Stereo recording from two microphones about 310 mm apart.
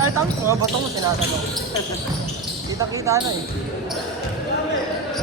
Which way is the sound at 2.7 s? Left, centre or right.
Centre.